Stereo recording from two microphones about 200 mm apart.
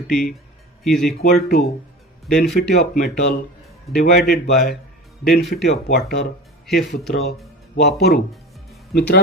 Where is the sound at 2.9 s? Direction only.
50° left (ahead or behind).